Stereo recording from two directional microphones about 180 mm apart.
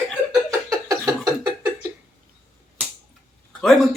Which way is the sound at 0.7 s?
15° right (ahead or behind).